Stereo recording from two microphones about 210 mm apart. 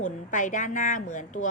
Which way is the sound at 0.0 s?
35° left (ahead or behind).